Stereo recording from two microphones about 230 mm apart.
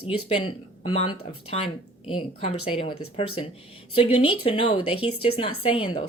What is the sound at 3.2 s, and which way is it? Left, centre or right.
Speech, left.